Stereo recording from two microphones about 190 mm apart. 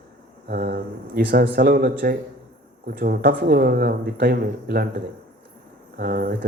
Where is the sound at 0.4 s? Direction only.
55° right (ahead or behind).